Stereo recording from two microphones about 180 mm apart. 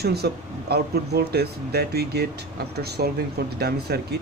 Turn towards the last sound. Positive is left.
turn(degrees=-65)  # may be behind; listen again after turning